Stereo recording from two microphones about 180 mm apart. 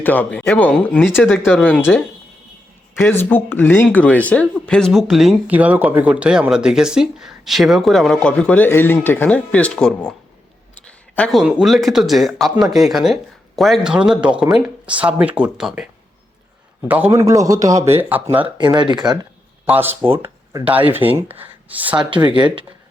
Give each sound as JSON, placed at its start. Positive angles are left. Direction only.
{"t": 0.0, "sound": "speech", "side_deg": 10}
{"t": 16.9, "sound": "speech", "side_deg": -10}
{"t": 18.4, "sound": "speech", "side_deg": -25}
{"t": 19.6, "sound": "speech", "side_deg": -10}
{"t": 20.1, "sound": "speech", "side_deg": -30}
{"t": 20.7, "sound": "speech", "side_deg": -10}
{"t": 22.1, "sound": "speech", "side_deg": -25}